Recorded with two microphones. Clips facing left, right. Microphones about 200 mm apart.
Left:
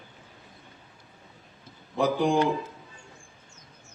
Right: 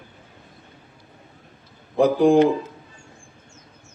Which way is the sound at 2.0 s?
60° right (ahead or behind).